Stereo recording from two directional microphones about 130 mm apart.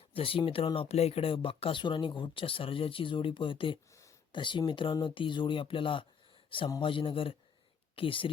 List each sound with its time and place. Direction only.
0.1 s speech: 45° left (ahead or behind)